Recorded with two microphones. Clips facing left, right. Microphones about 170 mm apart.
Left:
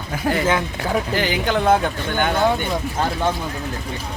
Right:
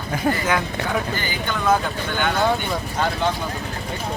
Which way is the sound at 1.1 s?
80° left.